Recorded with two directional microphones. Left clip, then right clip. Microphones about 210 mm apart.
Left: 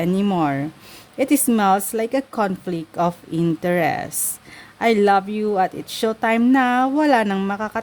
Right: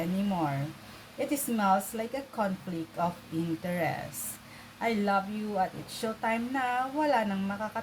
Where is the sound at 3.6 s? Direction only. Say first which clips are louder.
Left 13 dB; 55° left (ahead or behind).